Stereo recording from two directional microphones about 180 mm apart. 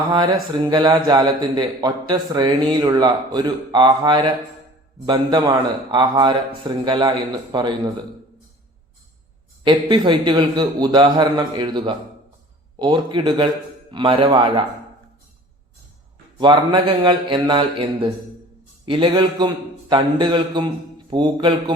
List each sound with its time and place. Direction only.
0.1 s a man's voice: 25° right (ahead or behind)
9.6 s a man's voice: 25° right (ahead or behind)
16.4 s a man's voice: 25° right (ahead or behind)